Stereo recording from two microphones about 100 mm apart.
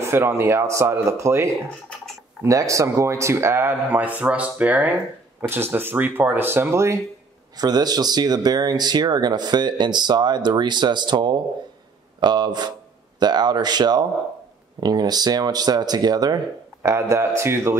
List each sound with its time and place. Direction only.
0.0 s speech: 25° right (ahead or behind)
7.5 s speech: 40° right (ahead or behind)
16.8 s speech: 30° right (ahead or behind)